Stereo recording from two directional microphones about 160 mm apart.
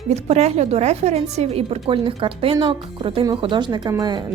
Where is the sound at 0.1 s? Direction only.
45° right (ahead or behind).